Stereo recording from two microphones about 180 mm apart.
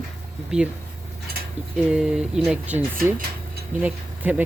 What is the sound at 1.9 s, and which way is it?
Speech, 5° right (ahead or behind).